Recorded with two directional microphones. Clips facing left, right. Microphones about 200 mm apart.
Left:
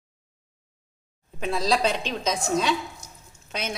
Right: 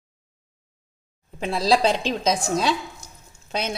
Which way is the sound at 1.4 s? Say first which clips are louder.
Right 4 dB; 30° right (ahead or behind).